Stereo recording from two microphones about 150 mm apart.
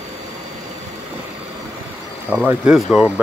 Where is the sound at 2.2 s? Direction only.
10° right (ahead or behind).